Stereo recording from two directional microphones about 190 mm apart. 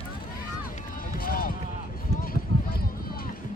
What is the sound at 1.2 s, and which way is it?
Run, 50° left (ahead or behind).